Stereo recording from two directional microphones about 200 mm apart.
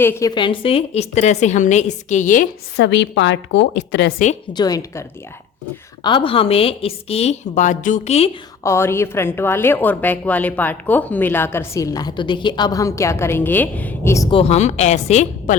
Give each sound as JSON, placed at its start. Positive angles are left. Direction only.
{"t": 0.0, "sound": "a woman's voice", "side_deg": 15}
{"t": 2.7, "sound": "a woman's voice", "side_deg": 65}
{"t": 4.5, "sound": "a woman's voice", "side_deg": 20}
{"t": 8.6, "sound": "a woman's voice", "side_deg": 15}
{"t": 14.3, "sound": "a woman's voice", "side_deg": 30}